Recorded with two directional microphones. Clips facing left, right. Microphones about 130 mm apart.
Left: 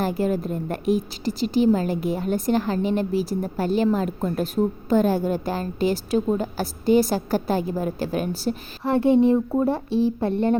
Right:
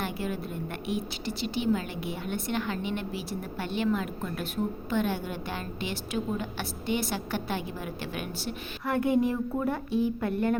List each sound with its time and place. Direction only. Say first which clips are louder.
0.0 s a woman's voice: left 9 dB; 40° left (ahead or behind)